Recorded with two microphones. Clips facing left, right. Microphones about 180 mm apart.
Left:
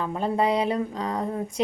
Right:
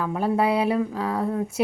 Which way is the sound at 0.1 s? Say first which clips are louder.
Right 2 dB; 5° right (ahead or behind).